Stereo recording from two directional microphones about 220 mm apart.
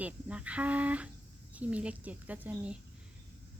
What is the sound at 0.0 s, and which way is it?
A woman's voice, 5° right (ahead or behind).